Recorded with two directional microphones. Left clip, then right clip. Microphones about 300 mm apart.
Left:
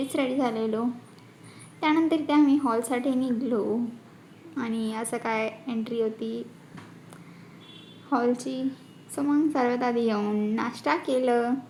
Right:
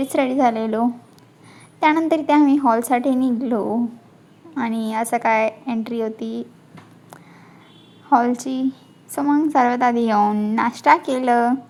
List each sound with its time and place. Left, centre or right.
0.0 s a woman's voice: right
8.1 s a woman's voice: right